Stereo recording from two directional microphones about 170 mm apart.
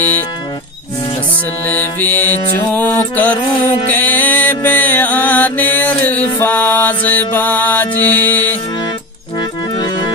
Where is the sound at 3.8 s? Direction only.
10° left (ahead or behind).